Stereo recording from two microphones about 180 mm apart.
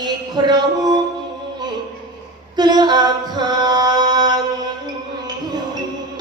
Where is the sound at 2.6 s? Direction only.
25° right (ahead or behind).